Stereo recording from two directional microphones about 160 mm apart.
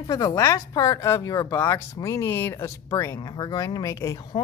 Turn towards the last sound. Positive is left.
turn(degrees=20)  # may be behind; listen again after turning